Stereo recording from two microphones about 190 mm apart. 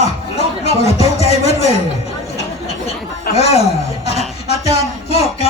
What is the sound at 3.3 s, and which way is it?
Speech, 35° left (ahead or behind).